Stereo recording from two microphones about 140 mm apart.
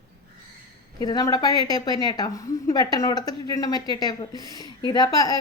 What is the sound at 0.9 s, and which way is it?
A woman's voice, 30° left (ahead or behind).